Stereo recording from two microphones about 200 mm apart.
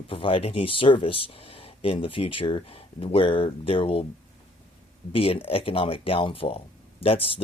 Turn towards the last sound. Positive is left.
turn(degrees=25)  # may be behind; listen again after turning